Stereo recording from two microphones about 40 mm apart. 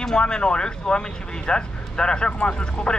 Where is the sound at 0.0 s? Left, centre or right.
Centre.